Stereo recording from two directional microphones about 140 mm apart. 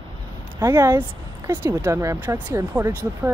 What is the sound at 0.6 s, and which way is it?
Speech, 20° right (ahead or behind).